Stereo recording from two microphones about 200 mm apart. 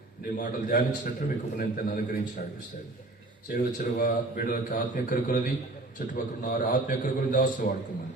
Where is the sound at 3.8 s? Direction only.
40° left (ahead or behind).